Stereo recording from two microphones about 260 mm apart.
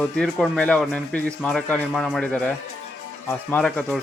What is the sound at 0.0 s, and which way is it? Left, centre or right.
Speech, centre.